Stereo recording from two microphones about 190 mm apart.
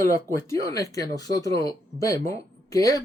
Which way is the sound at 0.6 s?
15° left (ahead or behind).